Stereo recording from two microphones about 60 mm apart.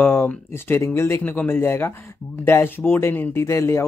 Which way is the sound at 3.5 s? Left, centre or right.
Left.